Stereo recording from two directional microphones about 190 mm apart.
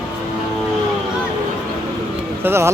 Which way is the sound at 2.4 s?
15° right (ahead or behind).